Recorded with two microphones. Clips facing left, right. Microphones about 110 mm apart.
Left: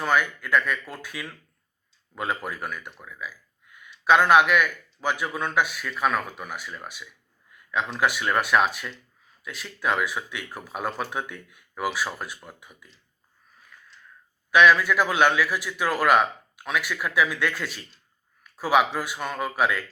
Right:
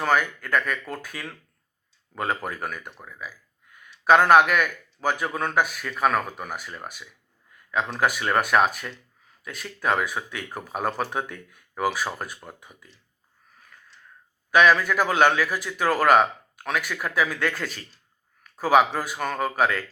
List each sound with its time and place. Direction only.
0.0 s speech: 45° right (ahead or behind)
14.5 s speech: 45° right (ahead or behind)